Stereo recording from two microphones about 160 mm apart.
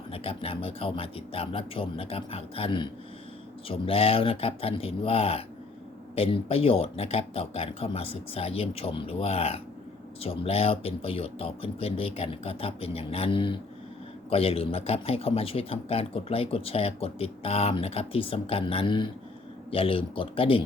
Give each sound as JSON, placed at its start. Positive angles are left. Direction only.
{"t": 0.1, "sound": "speech", "side_deg": 35}